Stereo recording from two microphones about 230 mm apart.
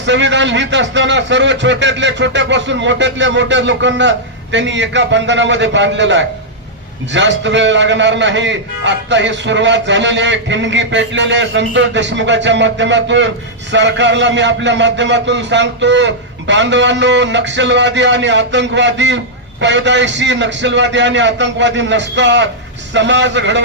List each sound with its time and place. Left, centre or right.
0.0 s a man's voice: right